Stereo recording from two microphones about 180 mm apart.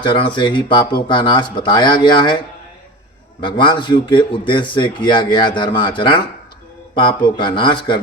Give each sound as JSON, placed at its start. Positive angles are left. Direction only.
{"t": 0.0, "sound": "a man's voice", "side_deg": 25}
{"t": 3.4, "sound": "a man's voice", "side_deg": 25}